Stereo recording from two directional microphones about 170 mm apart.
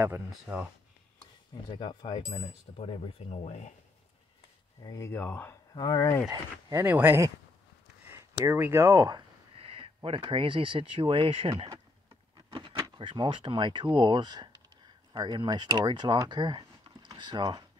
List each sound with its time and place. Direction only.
0.0 s speech: 10° right (ahead or behind)
1.5 s a sound: 30° left (ahead or behind)
4.8 s speech: 20° left (ahead or behind)
5.8 s speech: 25° left (ahead or behind)
6.7 s speech: 10° right (ahead or behind)
8.5 s speech: 15° right (ahead or behind)